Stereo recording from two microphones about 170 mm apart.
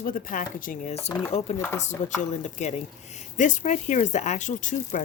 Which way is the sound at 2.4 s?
45° left (ahead or behind).